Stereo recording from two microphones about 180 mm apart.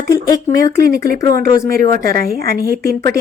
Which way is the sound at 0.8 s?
60° right (ahead or behind).